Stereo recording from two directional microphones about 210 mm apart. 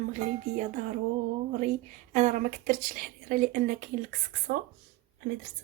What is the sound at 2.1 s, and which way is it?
Speech, 35° right (ahead or behind).